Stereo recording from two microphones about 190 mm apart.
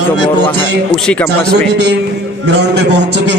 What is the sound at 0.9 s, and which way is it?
Speech, 5° left (ahead or behind).